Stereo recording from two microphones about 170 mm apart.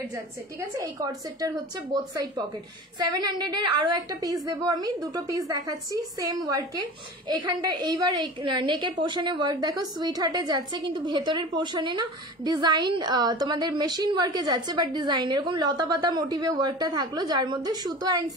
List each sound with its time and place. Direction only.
0.1 s a woman's voice: 20° right (ahead or behind)
3.0 s a woman's voice: 25° right (ahead or behind)